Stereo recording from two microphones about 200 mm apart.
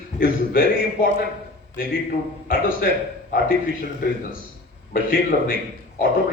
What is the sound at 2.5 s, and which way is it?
Speech, 45° left (ahead or behind).